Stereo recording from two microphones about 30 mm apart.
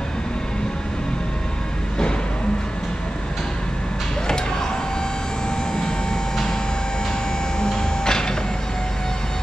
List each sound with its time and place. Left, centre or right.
7.6 s printer: left